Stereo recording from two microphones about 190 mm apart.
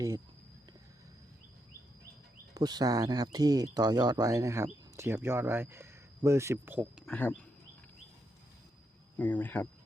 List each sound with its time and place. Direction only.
2.6 s speech: 20° right (ahead or behind); by 7.4 s 10° left (ahead or behind)
9.1 s speech: 10° left (ahead or behind)